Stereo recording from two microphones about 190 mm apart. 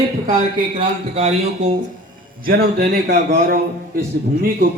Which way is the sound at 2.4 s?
55° right (ahead or behind).